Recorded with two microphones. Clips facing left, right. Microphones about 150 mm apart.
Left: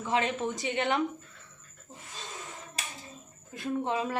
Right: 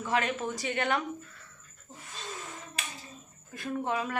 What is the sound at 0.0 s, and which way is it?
A woman's voice, 25° left (ahead or behind).